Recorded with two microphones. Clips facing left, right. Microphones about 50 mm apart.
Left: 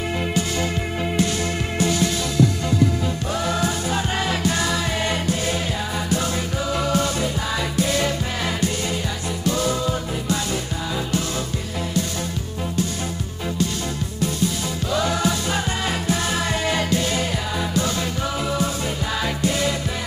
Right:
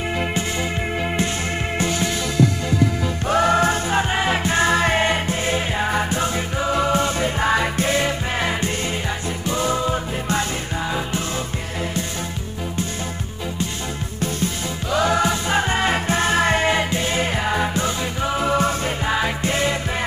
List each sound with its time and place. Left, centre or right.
1.8 s music: right
3.3 s music: right
4.1 s music: right
9.4 s music: right
14.9 s music: right